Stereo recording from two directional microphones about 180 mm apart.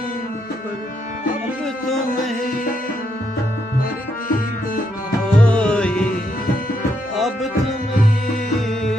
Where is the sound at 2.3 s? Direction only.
50° left (ahead or behind).